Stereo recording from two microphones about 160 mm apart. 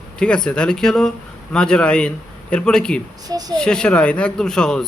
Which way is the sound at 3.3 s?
25° right (ahead or behind).